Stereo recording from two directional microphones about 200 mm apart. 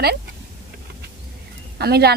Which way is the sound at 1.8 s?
55° right (ahead or behind).